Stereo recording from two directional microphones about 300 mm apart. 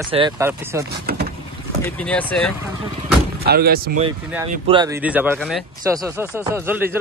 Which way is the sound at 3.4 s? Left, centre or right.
Right.